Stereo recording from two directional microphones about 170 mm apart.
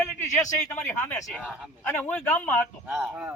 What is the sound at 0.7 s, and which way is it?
Speech, centre (ahead or behind).